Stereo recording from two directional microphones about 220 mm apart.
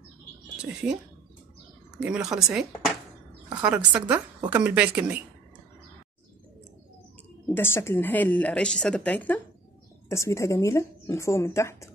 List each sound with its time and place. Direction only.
2.0 s speech: centre (ahead or behind)
7.4 s speech: 10° left (ahead or behind)